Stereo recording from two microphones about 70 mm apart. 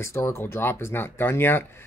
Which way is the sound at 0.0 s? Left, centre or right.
Left.